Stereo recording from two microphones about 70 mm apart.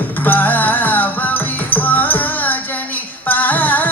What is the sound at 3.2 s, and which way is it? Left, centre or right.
Female singing, left.